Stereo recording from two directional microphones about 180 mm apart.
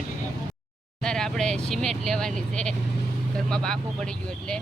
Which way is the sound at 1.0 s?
5° left (ahead or behind).